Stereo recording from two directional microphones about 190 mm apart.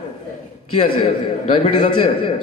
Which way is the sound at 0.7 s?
30° left (ahead or behind).